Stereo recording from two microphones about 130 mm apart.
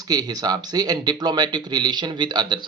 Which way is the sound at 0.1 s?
30° right (ahead or behind).